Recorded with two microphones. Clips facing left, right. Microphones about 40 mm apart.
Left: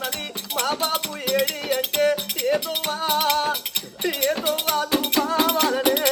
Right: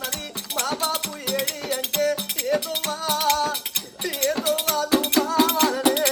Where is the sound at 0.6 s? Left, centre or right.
Left.